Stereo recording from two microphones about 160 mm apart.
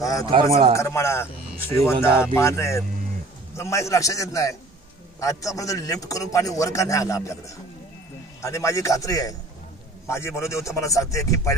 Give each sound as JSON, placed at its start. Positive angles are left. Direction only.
{"t": 0.0, "sound": "speech", "side_deg": 20}
{"t": 0.3, "sound": "speech", "side_deg": -35}
{"t": 0.7, "sound": "a man's voice", "side_deg": 15}